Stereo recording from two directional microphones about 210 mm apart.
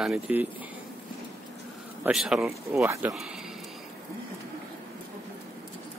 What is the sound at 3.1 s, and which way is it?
Speech, centre (ahead or behind).